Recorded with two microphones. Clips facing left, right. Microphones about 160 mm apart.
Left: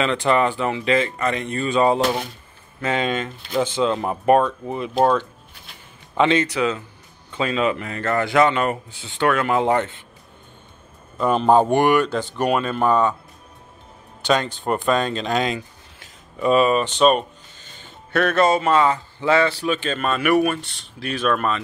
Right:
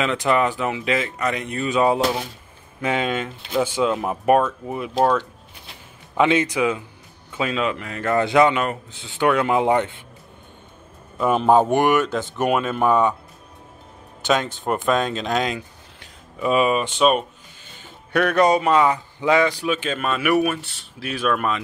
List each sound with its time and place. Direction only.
0.0 s speech: 5° right (ahead or behind)
8.0 s speech: 20° right (ahead or behind)
8.6 s speech: 5° left (ahead or behind)
9.2 s speech: 15° right (ahead or behind)
11.1 s speech: 5° right (ahead or behind)
14.2 s speech: 5° right (ahead or behind)